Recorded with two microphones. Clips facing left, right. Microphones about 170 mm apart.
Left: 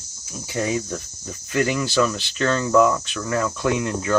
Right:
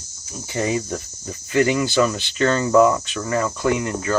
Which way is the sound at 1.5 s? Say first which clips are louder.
Right 3 dB; 5° right (ahead or behind).